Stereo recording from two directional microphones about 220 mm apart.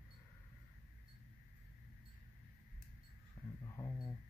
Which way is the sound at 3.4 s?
5° left (ahead or behind).